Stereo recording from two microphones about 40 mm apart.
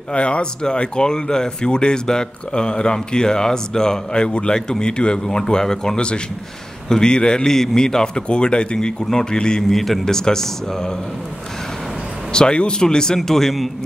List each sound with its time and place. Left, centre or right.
0.1 s speech: left
5.9 s speech: left
9.7 s speech: centre
12.3 s speech: left; by 13.7 s centre